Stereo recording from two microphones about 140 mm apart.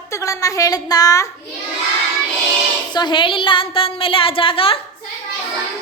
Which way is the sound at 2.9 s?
35° left (ahead or behind).